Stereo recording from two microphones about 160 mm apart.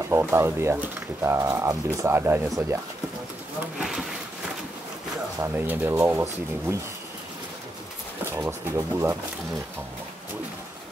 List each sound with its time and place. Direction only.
0.1 s speech: 15° right (ahead or behind)
3.7 s a sound: centre (ahead or behind)
5.4 s speech: 15° right (ahead or behind)
8.3 s speech: 15° right (ahead or behind)